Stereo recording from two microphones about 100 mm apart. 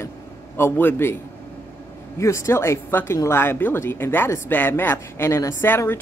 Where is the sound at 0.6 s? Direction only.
20° left (ahead or behind).